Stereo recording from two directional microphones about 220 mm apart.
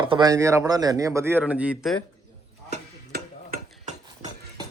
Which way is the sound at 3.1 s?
45° right (ahead or behind).